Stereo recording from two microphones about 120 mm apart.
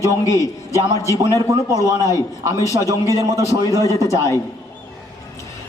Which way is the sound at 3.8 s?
25° left (ahead or behind).